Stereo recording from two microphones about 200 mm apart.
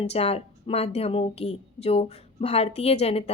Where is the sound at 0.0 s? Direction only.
30° left (ahead or behind).